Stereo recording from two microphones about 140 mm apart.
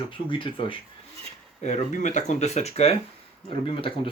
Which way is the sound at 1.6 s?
60° left (ahead or behind).